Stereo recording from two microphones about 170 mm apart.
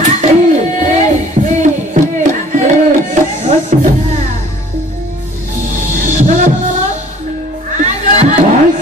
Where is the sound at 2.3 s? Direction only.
45° right (ahead or behind).